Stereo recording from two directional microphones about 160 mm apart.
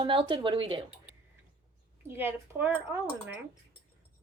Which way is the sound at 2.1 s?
10° right (ahead or behind).